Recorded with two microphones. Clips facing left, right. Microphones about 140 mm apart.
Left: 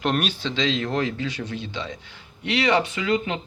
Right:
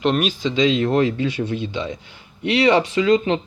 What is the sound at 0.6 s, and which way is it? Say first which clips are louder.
Speech: right 7 dB; 20° right (ahead or behind).